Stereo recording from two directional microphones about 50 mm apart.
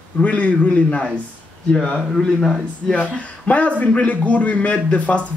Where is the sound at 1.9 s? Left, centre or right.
Centre.